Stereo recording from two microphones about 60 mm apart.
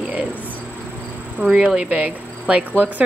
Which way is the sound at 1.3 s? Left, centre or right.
Centre.